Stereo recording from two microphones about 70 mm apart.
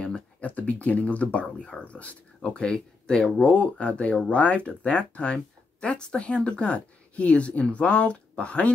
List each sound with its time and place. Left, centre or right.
0.0 s speech: centre